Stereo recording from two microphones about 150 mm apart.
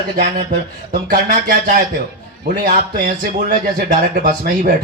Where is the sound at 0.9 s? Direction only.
70° right (ahead or behind).